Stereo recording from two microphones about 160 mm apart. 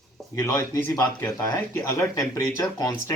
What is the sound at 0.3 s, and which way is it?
Speech, 20° left (ahead or behind).